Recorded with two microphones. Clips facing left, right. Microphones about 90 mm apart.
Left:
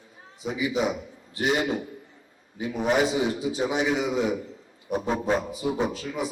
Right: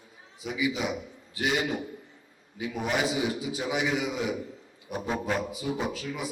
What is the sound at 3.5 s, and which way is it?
A man's voice, 30° left (ahead or behind).